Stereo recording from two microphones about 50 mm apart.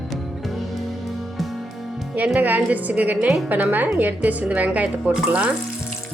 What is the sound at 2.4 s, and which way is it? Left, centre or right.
A woman's voice, right.